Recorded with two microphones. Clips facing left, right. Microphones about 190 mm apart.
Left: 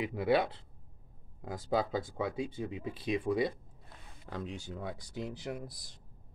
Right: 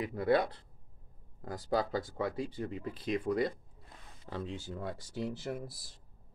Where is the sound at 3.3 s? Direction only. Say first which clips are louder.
Even; 5° left (ahead or behind).